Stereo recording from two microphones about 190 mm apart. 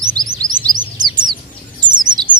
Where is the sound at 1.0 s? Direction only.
25° right (ahead or behind).